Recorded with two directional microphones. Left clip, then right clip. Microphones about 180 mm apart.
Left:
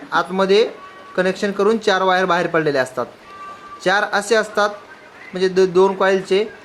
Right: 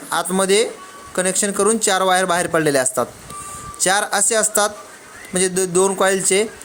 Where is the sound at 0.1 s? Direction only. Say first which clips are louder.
Left 2 dB; 35° right (ahead or behind).